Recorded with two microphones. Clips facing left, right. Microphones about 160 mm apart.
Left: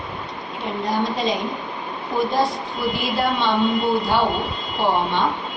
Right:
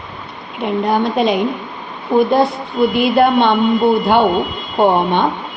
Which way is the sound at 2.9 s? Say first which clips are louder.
Right 10 dB; 60° right (ahead or behind).